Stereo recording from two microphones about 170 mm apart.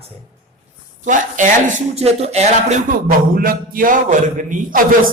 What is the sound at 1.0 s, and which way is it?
Speech, 50° right (ahead or behind).